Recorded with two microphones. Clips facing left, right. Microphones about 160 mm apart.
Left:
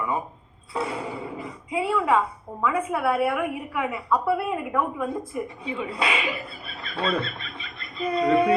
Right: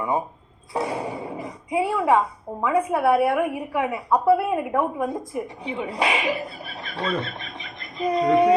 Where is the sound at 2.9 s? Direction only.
30° right (ahead or behind).